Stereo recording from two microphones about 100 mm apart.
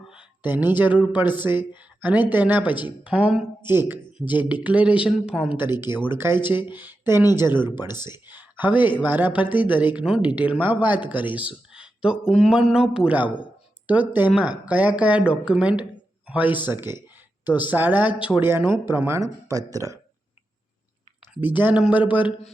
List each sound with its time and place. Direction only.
0.0 s a sound: 5° right (ahead or behind)
0.4 s speech: 20° right (ahead or behind)
5.5 s speech: 20° right (ahead or behind)
18.6 s speech: 50° left (ahead or behind)
18.9 s speech: 25° right (ahead or behind)
21.4 s speech: 15° right (ahead or behind)